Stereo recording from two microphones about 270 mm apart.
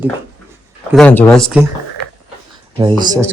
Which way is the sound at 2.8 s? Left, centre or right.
Centre.